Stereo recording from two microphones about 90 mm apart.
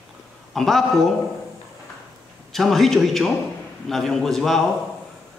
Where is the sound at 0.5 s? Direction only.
5° left (ahead or behind).